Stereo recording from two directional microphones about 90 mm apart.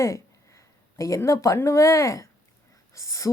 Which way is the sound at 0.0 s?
35° left (ahead or behind).